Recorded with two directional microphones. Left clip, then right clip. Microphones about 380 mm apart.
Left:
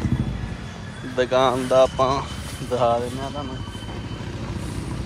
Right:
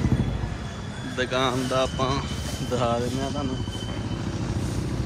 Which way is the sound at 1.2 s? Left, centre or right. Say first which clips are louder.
Left 6 dB; centre.